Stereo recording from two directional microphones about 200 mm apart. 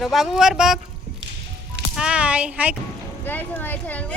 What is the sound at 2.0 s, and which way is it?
Speech, 5° right (ahead or behind).